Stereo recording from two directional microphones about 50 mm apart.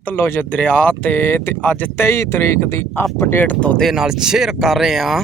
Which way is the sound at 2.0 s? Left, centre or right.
Left.